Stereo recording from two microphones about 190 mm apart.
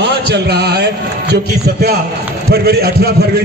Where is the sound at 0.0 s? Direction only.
60° right (ahead or behind).